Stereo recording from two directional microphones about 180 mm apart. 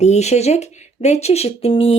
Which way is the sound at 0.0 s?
40° left (ahead or behind).